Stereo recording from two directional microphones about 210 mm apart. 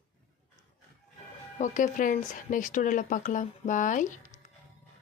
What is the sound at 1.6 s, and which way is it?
Speech, 40° left (ahead or behind).